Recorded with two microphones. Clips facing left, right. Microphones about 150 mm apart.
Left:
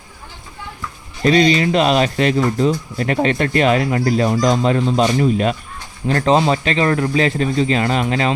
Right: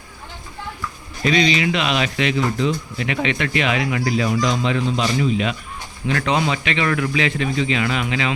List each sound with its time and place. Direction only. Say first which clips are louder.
1.2 s speech: left 5 dB; 40° left (ahead or behind)